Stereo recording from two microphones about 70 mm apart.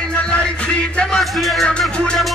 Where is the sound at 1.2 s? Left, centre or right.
Centre.